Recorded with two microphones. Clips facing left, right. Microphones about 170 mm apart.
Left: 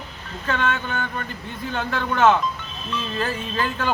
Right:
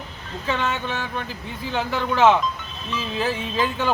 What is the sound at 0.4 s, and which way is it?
Speech, 5° right (ahead or behind).